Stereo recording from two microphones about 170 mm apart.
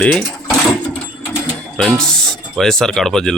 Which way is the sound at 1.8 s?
5° left (ahead or behind).